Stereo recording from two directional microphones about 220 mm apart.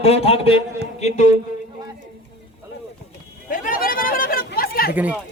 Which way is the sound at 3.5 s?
40° left (ahead or behind).